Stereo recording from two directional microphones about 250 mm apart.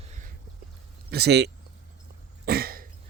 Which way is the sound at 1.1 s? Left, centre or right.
Right.